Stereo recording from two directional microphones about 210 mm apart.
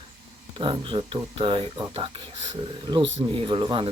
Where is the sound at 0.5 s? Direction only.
25° right (ahead or behind).